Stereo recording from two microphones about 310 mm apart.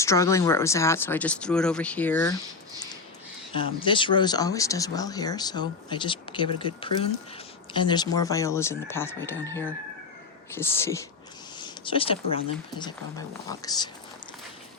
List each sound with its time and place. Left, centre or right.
0.0 s speech: centre
3.5 s speech: centre
10.6 s speech: centre
11.6 s a sound: centre
12.8 s speech: centre